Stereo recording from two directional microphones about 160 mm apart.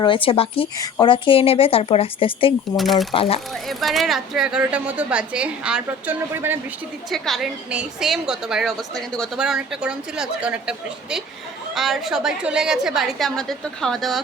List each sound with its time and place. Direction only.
0.0 s a woman's voice: 30° left (ahead or behind)
2.7 s a woman's voice: centre (ahead or behind)
3.1 s a woman's voice: 35° left (ahead or behind)
3.7 s a woman's voice: centre (ahead or behind)
7.1 s a woman's voice: centre (ahead or behind)